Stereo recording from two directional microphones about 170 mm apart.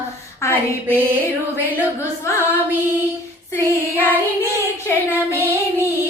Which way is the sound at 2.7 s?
10° right (ahead or behind).